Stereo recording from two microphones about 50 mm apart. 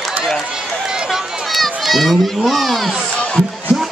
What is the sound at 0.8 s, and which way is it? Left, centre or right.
A child's voice, centre.